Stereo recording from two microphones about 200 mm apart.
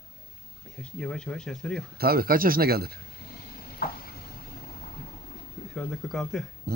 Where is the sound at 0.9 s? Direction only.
5° left (ahead or behind).